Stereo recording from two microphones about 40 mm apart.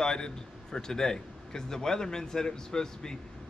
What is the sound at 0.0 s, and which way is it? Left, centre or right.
A man's voice, centre.